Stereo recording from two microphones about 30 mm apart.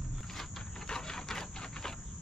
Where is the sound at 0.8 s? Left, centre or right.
Left.